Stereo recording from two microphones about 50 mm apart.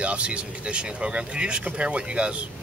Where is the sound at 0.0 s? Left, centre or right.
Right.